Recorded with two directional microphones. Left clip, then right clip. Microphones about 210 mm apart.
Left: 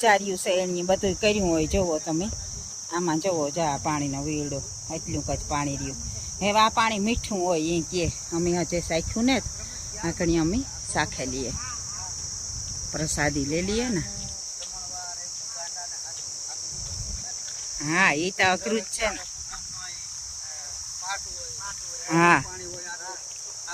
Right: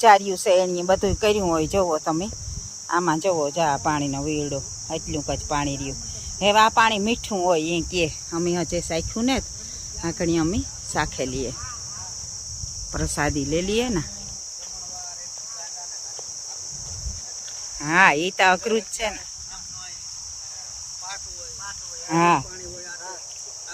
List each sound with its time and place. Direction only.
0.0 s speech: 15° right (ahead or behind)
12.9 s speech: 5° right (ahead or behind)
17.8 s speech: 10° right (ahead or behind)
22.1 s speech: centre (ahead or behind)